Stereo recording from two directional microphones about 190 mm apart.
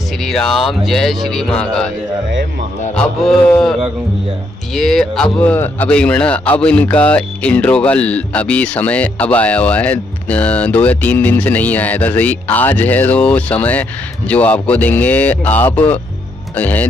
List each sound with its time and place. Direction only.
0.2 s speech: centre (ahead or behind)
3.0 s speech: 5° left (ahead or behind)
4.7 s speech: centre (ahead or behind)